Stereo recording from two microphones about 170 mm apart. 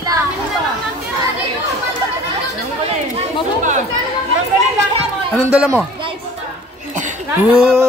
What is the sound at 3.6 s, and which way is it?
Speech, 45° right (ahead or behind).